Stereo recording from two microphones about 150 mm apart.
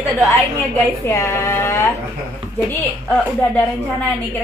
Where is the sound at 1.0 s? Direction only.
15° left (ahead or behind).